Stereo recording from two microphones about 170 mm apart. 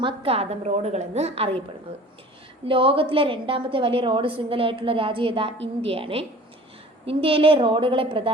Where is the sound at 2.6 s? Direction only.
30° right (ahead or behind).